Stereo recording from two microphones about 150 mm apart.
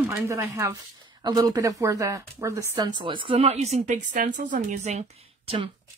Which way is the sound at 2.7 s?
30° right (ahead or behind).